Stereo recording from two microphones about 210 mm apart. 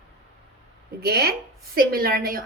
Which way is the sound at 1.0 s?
50° right (ahead or behind).